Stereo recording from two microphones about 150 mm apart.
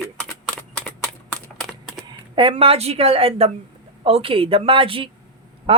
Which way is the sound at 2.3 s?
35° right (ahead or behind).